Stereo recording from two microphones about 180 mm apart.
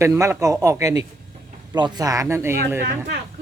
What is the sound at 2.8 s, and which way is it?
Speech, 60° right (ahead or behind).